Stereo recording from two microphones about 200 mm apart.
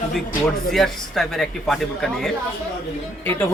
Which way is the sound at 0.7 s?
Centre (ahead or behind).